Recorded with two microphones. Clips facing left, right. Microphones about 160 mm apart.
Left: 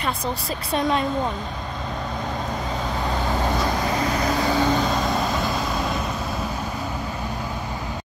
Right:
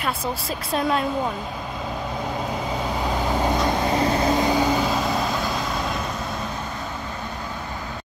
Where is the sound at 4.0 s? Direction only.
25° right (ahead or behind).